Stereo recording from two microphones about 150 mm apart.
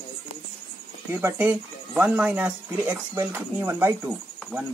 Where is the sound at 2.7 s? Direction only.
20° right (ahead or behind).